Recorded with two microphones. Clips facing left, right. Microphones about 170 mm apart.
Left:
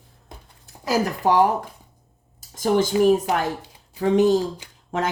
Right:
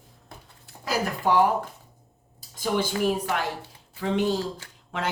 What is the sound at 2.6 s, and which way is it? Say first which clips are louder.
Speech: left 7 dB; 45° left (ahead or behind).